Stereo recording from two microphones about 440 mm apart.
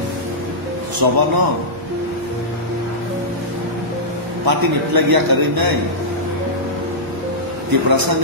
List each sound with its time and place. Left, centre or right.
0.9 s a man's voice: right
4.5 s a man's voice: right
7.9 s a man's voice: right